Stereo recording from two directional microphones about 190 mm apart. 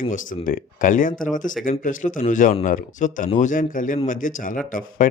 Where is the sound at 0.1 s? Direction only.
45° left (ahead or behind).